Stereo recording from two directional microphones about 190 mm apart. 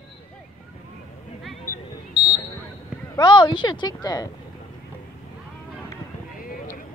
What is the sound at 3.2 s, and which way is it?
A woman's voice, 25° left (ahead or behind).